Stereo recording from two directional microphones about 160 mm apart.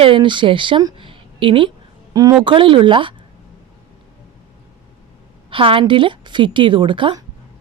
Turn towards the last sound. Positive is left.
turn(degrees=-30)  # may be behind; listen again after turning